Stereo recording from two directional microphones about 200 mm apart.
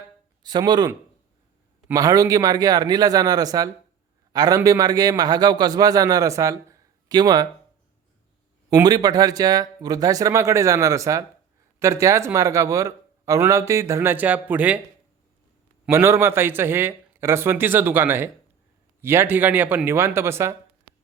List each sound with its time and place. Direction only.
0.4 s a man's voice: 20° right (ahead or behind)
8.7 s a man's voice: 20° right (ahead or behind)
15.9 s a man's voice: 15° right (ahead or behind)